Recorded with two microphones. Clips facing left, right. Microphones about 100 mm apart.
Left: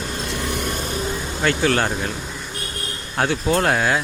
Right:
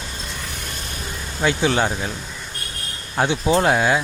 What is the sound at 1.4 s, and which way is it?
Speech, 15° right (ahead or behind).